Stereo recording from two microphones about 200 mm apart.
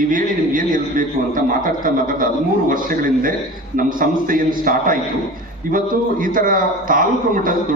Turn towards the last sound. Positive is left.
turn(degrees=-45)  # may be behind; listen again after turning